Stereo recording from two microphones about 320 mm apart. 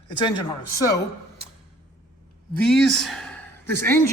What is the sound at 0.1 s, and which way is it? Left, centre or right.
Speech, centre.